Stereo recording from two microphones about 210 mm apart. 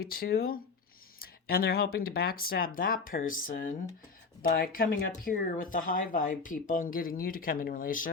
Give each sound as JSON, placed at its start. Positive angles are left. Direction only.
{"t": 0.0, "sound": "speech", "side_deg": 45}